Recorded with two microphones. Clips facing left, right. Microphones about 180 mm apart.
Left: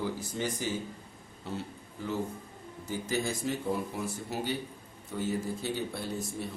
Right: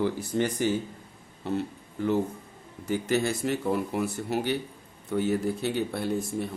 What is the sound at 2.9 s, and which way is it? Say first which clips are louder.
Speech: right 6 dB; 70° right (ahead or behind).